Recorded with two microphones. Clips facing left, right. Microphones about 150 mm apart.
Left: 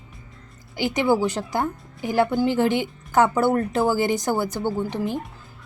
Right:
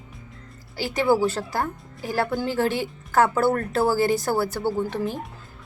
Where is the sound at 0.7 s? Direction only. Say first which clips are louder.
Left 1 dB; 20° left (ahead or behind).